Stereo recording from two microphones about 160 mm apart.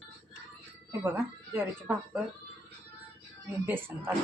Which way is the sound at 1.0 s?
15° right (ahead or behind).